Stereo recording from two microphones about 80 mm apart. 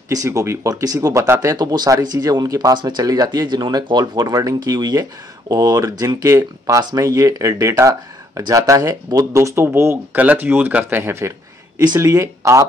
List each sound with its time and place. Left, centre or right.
0.1 s speech: right